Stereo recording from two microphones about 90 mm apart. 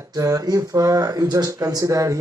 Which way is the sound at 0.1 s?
40° right (ahead or behind).